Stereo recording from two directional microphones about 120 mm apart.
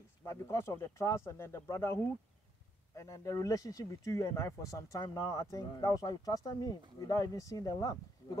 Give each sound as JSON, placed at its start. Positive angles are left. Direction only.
{"t": 0.2, "sound": "speech", "side_deg": 25}